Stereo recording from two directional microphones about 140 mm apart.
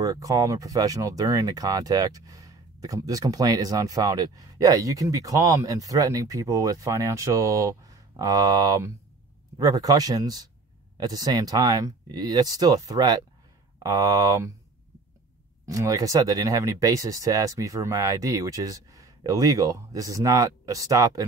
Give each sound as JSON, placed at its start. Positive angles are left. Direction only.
{"t": 0.0, "sound": "speech", "side_deg": -25}
{"t": 15.6, "sound": "speech", "side_deg": -25}